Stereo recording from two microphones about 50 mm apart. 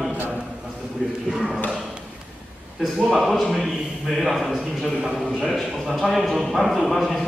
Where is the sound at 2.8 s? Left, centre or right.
Centre.